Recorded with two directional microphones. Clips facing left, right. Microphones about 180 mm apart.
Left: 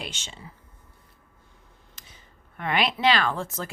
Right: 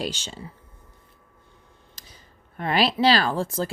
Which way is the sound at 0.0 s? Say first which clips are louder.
Right 8 dB; 35° right (ahead or behind).